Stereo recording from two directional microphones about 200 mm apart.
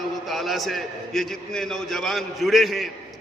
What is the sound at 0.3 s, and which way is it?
A man's voice, centre (ahead or behind).